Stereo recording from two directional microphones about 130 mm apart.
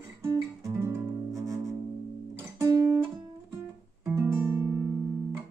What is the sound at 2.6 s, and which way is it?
Guitar, 25° right (ahead or behind).